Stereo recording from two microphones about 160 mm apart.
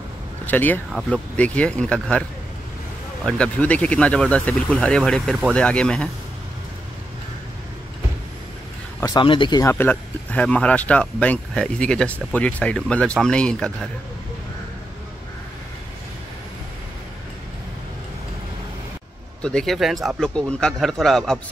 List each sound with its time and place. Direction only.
0.5 s speech: 10° left (ahead or behind)
3.3 s speech: 10° left (ahead or behind)
9.0 s speech: 30° left (ahead or behind)
9.6 s speech: 15° left (ahead or behind)
19.4 s speech: 5° left (ahead or behind)